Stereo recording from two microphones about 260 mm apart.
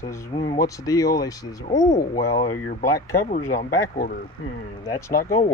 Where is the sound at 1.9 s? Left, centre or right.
Left.